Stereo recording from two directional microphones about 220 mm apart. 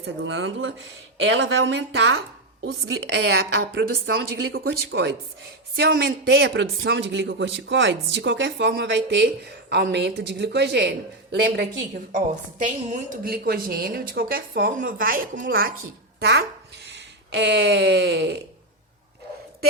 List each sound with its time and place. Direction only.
0.0 s a man's voice: 55° right (ahead or behind)
12.1 s a woman's voice: 35° right (ahead or behind)
16.9 s speech: 50° right (ahead or behind)